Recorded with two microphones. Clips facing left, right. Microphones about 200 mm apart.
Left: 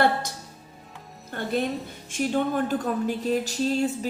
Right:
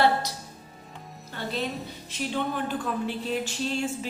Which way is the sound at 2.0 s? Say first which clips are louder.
Left 5 dB; 50° left (ahead or behind).